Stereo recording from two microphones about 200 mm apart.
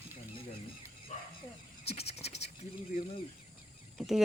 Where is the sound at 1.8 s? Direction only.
30° left (ahead or behind).